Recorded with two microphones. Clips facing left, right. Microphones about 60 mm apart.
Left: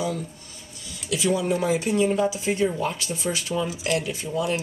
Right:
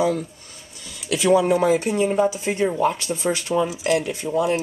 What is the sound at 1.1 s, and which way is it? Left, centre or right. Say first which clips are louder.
Speech: right 6 dB; right.